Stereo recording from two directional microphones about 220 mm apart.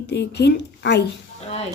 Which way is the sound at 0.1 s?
50° left (ahead or behind).